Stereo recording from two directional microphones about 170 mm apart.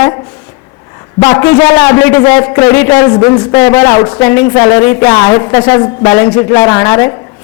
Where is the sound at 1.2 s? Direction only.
15° left (ahead or behind).